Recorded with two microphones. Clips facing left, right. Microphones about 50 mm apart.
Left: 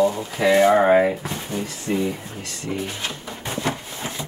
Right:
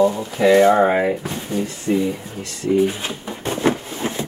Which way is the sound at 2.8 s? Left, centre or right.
Centre.